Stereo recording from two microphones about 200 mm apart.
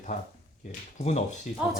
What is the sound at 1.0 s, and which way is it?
Speech, 35° left (ahead or behind).